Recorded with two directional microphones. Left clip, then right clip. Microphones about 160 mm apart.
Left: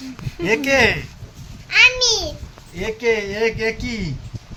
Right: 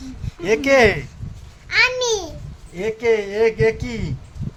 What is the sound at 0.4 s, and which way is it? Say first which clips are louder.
Speech: right 2 dB; 60° right (ahead or behind).